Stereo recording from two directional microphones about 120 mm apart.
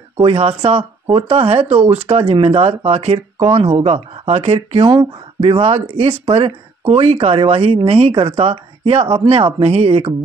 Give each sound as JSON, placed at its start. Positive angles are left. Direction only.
{"t": 0.2, "sound": "speech", "side_deg": -55}